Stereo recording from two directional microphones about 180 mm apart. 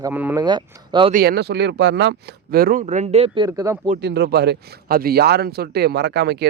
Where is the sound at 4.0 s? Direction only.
65° right (ahead or behind).